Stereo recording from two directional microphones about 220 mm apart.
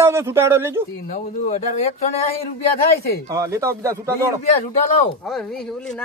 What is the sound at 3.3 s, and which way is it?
Speech, 15° right (ahead or behind).